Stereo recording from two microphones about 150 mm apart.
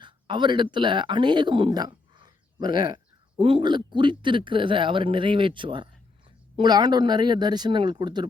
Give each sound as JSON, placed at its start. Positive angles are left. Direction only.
{"t": 0.0, "sound": "speech", "side_deg": -30}